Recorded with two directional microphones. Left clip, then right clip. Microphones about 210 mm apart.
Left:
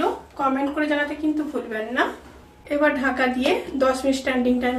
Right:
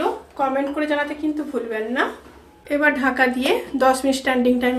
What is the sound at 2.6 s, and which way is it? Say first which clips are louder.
Speech: right 2 dB; 50° right (ahead or behind).